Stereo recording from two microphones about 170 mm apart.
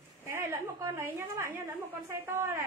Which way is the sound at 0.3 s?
15° right (ahead or behind).